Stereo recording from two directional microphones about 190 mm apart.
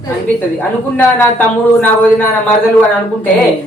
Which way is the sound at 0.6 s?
10° left (ahead or behind).